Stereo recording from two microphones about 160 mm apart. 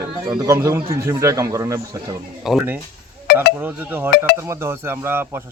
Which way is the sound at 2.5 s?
10° right (ahead or behind).